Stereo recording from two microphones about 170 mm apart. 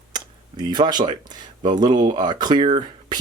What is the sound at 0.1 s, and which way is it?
Speech, 25° right (ahead or behind).